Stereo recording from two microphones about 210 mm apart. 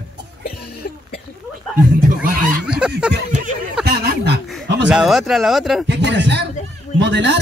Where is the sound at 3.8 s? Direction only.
45° right (ahead or behind).